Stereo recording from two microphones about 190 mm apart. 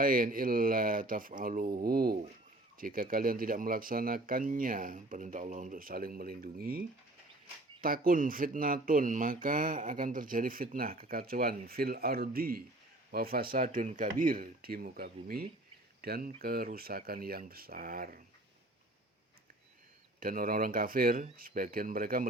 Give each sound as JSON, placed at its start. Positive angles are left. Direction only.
{"t": 0.0, "sound": "speech", "side_deg": -45}
{"t": 20.1, "sound": "speech", "side_deg": -50}